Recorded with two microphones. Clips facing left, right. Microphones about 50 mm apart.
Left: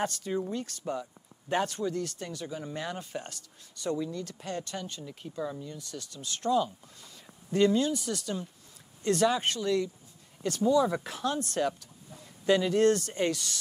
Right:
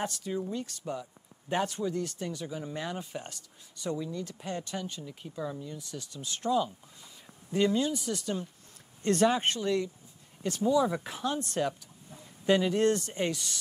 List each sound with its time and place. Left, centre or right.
0.2 s speech: centre
1.7 s speech: centre
2.4 s speech: centre
5.0 s speech: centre
5.8 s speech: centre
8.2 s speech: right
10.4 s speech: centre